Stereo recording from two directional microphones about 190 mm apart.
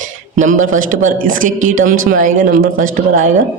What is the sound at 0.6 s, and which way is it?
A man's voice, 45° right (ahead or behind).